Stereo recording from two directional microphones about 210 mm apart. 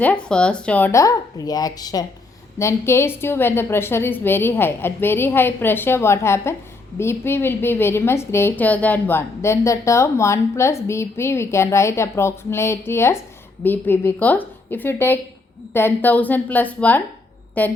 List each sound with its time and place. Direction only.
0.0 s a woman's voice: 5° left (ahead or behind)